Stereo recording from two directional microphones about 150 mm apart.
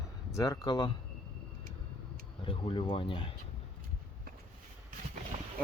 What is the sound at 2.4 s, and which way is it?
Speech, 35° left (ahead or behind).